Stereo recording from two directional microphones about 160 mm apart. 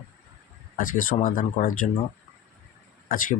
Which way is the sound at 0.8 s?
60° left (ahead or behind).